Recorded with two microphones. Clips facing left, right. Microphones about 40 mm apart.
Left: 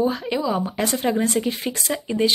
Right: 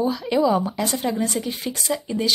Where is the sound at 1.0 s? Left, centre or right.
Left.